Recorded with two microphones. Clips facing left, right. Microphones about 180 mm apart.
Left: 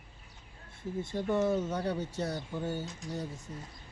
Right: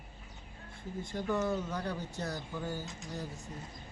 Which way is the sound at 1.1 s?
25° left (ahead or behind).